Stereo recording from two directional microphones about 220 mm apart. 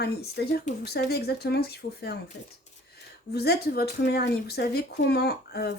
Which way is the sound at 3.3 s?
45° left (ahead or behind).